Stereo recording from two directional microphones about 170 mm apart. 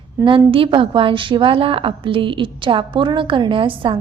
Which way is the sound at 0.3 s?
30° right (ahead or behind).